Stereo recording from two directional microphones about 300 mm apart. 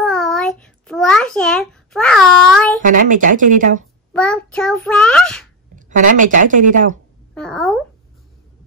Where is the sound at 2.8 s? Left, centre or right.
Right.